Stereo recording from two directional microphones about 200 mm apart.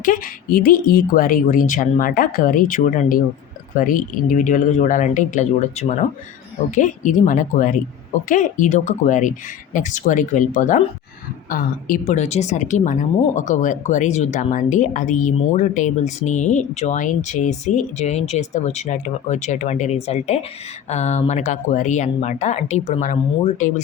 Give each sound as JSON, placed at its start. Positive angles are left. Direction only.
{"t": 0.0, "sound": "speech", "side_deg": 45}